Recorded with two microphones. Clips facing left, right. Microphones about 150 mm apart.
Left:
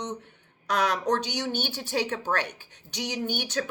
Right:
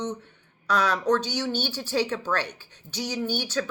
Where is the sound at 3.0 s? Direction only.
15° left (ahead or behind).